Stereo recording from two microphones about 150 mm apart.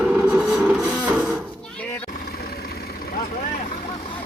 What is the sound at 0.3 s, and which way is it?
Printer, 10° right (ahead or behind).